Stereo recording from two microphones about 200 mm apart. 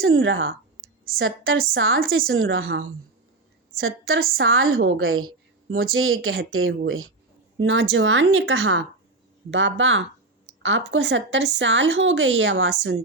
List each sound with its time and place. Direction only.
0.0 s speech: 80° right
3.8 s a woman's voice: 90° right
7.6 s speech: 70° right (ahead or behind)